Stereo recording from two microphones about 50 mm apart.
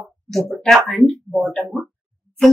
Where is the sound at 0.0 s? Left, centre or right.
Centre.